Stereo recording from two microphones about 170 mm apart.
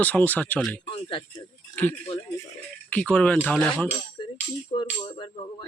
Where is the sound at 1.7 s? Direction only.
10° left (ahead or behind).